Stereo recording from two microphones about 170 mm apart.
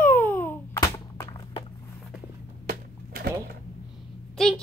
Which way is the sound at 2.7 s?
65° right (ahead or behind).